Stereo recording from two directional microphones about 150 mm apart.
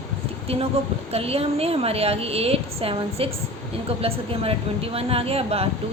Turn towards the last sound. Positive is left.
turn(degrees=-40)  # may be behind; listen again after turning